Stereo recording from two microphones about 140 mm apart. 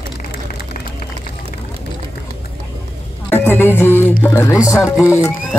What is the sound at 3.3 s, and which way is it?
Music, 15° left (ahead or behind).